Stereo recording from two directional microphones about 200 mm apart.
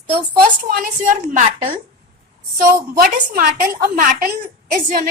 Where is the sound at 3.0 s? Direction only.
45° right (ahead or behind).